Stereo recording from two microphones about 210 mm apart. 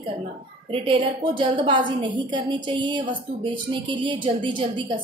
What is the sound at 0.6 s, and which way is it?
A woman's voice, 25° right (ahead or behind).